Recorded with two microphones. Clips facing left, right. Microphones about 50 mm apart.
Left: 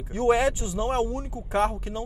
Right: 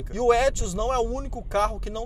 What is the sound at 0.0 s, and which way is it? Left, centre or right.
Speech, centre.